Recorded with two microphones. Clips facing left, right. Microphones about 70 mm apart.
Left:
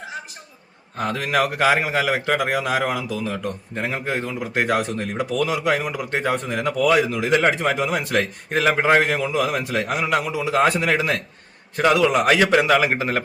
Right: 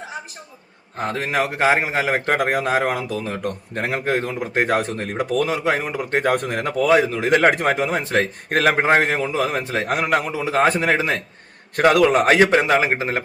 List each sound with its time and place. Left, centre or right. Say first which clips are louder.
0.9 s a man's voice: left 1 dB; right
8.4 s a man's voice: right 2 dB; right
8.8 s a man's voice: even; right
11.8 s a man's voice: right 2 dB; right